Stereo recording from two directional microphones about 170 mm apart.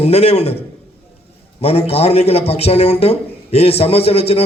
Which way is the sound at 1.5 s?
35° left (ahead or behind).